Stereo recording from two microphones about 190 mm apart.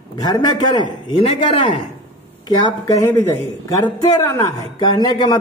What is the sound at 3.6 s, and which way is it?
A man's voice, 15° left (ahead or behind).